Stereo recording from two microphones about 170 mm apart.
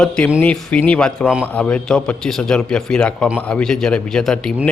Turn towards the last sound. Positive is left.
turn(degrees=5)  # may be behind; listen again after turning